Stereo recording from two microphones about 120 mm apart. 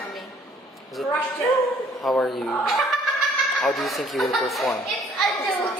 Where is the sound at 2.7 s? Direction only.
Centre (ahead or behind).